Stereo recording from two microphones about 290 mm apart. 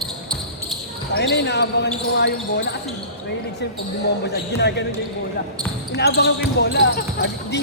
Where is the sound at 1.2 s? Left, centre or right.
Left.